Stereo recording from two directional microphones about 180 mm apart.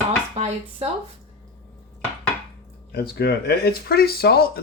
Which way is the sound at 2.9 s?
60° left (ahead or behind).